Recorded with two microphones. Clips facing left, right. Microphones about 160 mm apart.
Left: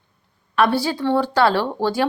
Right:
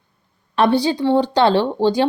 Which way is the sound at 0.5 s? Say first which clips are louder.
Right 3 dB; 20° right (ahead or behind).